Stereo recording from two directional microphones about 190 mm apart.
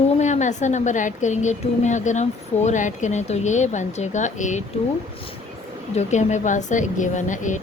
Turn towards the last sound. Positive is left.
turn(degrees=40)  # may be behind; listen again after turning